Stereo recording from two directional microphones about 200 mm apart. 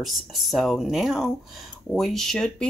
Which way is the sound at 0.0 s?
Centre (ahead or behind).